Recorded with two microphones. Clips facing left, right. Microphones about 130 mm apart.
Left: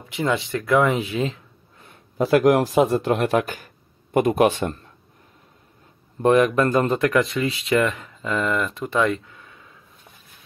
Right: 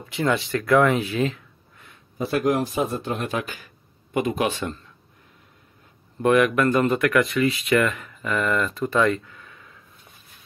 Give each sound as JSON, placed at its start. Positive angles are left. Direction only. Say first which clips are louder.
{"t": 0.1, "sound": "speech", "louder": "even", "side_deg": 20}
{"t": 2.1, "sound": "a man's voice", "louder": "left 6 dB", "side_deg": 75}
{"t": 6.2, "sound": "speech", "louder": "left 1 dB", "side_deg": 30}